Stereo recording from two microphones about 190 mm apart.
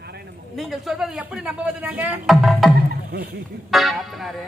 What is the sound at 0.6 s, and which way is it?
Music, centre (ahead or behind).